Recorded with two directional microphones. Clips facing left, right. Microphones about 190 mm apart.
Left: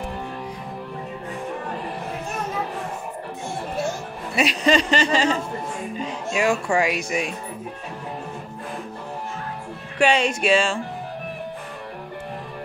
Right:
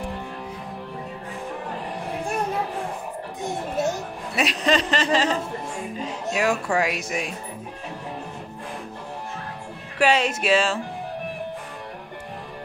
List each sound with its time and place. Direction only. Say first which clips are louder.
3.4 s music: right 2 dB; 20° right (ahead or behind)
4.4 s speech: left 3 dB; centre (ahead or behind)
9.9 s speech: left 1 dB; 5° right (ahead or behind)